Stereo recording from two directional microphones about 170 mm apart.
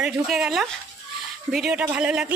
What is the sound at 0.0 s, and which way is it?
A child's voice, 5° right (ahead or behind).